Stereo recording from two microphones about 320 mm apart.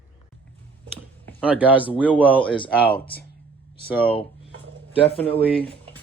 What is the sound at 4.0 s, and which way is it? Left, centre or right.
Speech, centre.